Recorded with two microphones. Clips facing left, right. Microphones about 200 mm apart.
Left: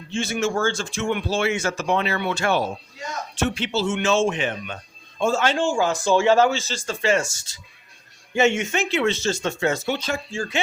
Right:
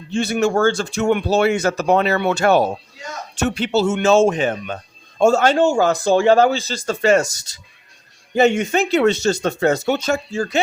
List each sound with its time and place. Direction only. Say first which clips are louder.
0.4 s speech: right 7 dB; 40° right (ahead or behind)
8.4 s speech: right 5 dB; 35° right (ahead or behind)